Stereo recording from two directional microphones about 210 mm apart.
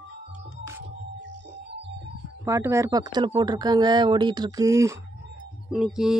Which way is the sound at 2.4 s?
15° right (ahead or behind).